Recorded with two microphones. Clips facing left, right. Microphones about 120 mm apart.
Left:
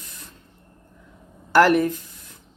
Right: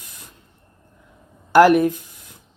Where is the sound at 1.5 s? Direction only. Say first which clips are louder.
Right 4 dB; 15° right (ahead or behind).